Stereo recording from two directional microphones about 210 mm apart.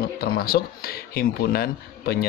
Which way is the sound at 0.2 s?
45° left (ahead or behind).